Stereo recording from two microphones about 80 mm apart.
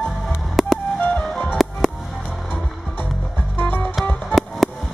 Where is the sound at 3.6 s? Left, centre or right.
Left.